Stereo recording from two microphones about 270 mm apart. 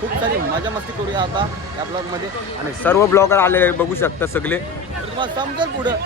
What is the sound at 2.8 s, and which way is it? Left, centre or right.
Speech, centre.